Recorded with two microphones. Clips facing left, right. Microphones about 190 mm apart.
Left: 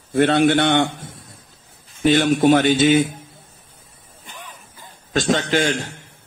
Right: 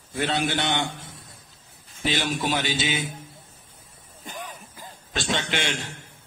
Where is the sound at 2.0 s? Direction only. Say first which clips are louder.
Left 12 dB; 50° left (ahead or behind).